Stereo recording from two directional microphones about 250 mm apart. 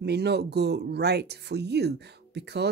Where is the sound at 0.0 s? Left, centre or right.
Right.